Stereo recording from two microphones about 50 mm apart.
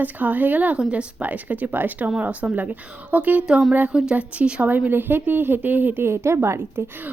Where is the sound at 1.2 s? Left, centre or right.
Right.